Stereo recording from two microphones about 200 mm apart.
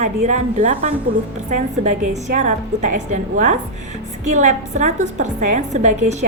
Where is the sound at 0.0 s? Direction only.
35° right (ahead or behind).